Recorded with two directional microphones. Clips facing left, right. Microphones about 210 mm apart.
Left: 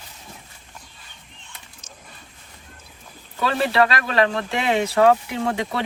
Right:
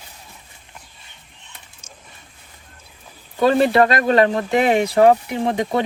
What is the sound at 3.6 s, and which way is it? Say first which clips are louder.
Speech: right 1 dB; 45° right (ahead or behind).